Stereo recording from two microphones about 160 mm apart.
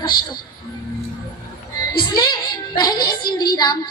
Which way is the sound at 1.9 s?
25° left (ahead or behind).